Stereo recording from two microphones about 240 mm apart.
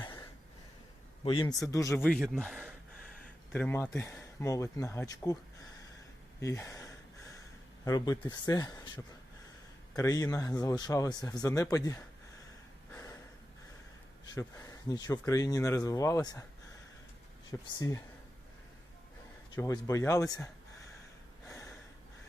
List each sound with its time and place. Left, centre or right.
0.0 s cough: centre
1.2 s speech: left
6.4 s speech: centre
12.9 s snort: centre
14.3 s speech: centre
17.7 s speech: centre
19.5 s speech: centre